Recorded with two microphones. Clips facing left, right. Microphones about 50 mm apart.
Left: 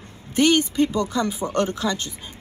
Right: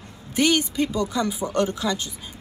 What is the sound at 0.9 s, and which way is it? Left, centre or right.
Speech, centre.